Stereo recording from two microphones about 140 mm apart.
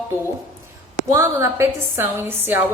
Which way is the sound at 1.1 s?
20° right (ahead or behind).